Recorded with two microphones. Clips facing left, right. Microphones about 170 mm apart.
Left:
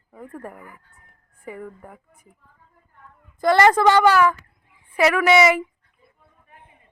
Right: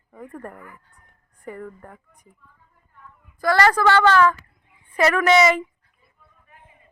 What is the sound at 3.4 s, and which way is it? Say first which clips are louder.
A woman's voice: left 3 dB; 20° left (ahead or behind).